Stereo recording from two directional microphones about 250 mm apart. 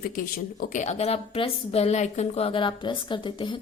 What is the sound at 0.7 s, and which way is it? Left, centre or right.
A woman's voice, left.